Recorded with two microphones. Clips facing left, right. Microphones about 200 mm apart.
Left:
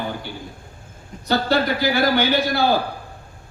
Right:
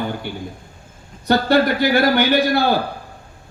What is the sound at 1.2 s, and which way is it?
A man's voice, 55° right (ahead or behind).